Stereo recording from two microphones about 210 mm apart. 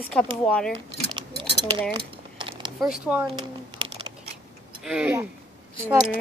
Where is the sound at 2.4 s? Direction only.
20° right (ahead or behind).